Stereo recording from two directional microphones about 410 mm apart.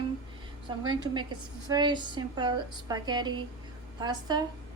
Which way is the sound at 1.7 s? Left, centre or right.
Centre.